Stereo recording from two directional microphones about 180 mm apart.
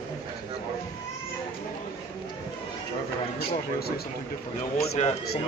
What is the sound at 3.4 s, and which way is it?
Speech, 60° left (ahead or behind).